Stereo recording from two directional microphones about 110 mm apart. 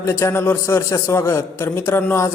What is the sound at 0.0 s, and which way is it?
A man's voice, 25° left (ahead or behind).